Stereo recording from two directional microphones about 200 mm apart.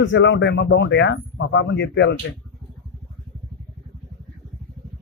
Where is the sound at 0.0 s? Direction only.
65° left (ahead or behind).